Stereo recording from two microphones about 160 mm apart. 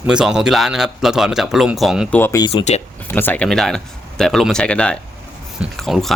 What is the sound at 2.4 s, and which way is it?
Speech, 35° left (ahead or behind).